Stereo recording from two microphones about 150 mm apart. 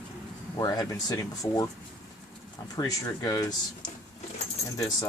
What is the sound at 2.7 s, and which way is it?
Speech, 25° left (ahead or behind).